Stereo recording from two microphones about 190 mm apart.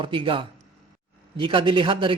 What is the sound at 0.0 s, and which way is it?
A man's voice, 25° right (ahead or behind).